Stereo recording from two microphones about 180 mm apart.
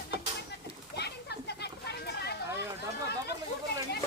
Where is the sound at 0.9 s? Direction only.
65° left (ahead or behind).